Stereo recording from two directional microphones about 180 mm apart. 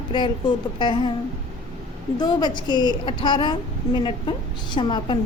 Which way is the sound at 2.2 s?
25° left (ahead or behind).